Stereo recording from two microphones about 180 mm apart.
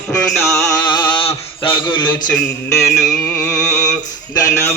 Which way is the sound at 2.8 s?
15° left (ahead or behind).